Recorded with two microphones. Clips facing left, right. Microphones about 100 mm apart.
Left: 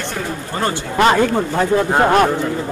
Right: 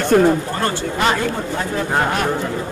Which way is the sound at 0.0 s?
50° right (ahead or behind).